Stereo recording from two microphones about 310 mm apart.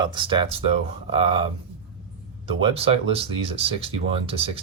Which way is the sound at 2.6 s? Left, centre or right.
Centre.